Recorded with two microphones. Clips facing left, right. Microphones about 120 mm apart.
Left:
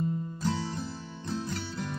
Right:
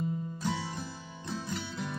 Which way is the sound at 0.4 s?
5° right (ahead or behind).